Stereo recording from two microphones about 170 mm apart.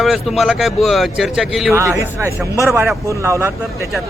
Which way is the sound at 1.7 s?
15° right (ahead or behind).